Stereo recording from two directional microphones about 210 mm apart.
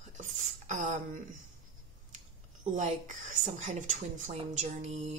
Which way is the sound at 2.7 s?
35° right (ahead or behind).